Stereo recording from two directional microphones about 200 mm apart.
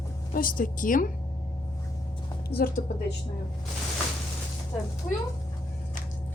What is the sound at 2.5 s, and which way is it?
Speech, 50° left (ahead or behind).